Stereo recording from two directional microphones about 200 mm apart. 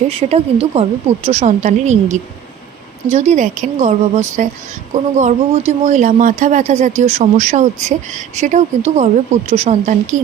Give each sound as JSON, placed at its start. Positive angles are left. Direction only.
{"t": 0.1, "sound": "speech", "side_deg": -30}